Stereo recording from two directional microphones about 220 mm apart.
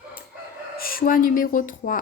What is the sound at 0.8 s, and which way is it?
Speech, 40° left (ahead or behind).